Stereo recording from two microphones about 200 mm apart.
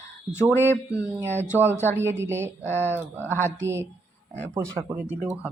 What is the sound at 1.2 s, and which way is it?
Speech, 10° right (ahead or behind).